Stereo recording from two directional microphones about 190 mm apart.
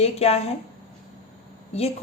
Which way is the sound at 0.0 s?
35° left (ahead or behind).